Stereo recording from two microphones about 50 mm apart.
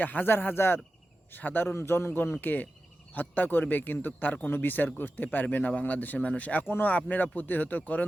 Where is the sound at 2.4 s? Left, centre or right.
Left.